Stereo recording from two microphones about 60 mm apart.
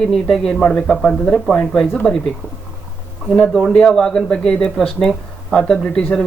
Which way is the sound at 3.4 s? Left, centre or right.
Centre.